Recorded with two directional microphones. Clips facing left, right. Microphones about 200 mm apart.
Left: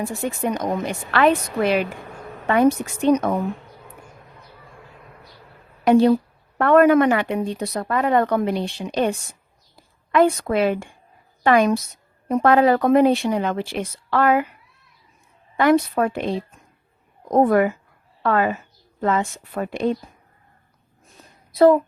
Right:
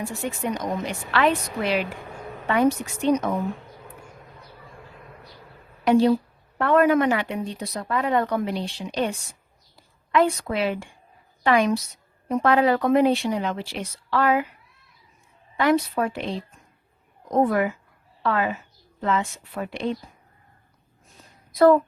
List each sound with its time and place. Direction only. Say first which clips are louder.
0.4 s speech: left 4 dB; 50° left (ahead or behind)
5.8 s a woman's voice: left 3 dB; 55° left (ahead or behind)
15.5 s a woman's voice: left 4 dB; 50° left (ahead or behind)
21.5 s a woman's voice: left 2 dB; 20° left (ahead or behind)